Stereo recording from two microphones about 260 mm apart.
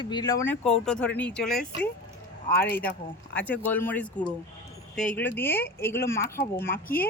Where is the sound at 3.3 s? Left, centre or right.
Centre.